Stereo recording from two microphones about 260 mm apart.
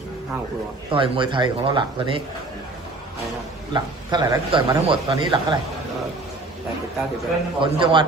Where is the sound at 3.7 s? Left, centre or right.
Centre.